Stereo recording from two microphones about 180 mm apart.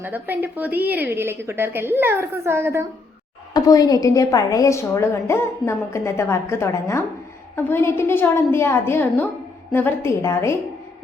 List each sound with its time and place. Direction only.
0.0 s a woman's voice: 10° right (ahead or behind)
3.5 s a woman's voice: 20° left (ahead or behind)